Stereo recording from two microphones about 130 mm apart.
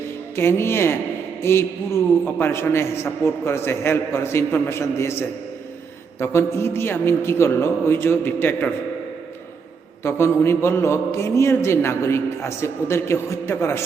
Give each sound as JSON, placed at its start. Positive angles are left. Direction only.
{"t": 0.3, "sound": "a man's voice", "side_deg": 20}
{"t": 6.1, "sound": "a man's voice", "side_deg": 20}
{"t": 10.0, "sound": "a man's voice", "side_deg": 20}